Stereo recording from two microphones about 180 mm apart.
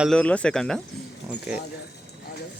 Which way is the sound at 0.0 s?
5° left (ahead or behind).